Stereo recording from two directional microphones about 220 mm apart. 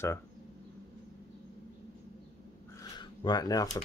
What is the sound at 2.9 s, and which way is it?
Speech, 20° left (ahead or behind).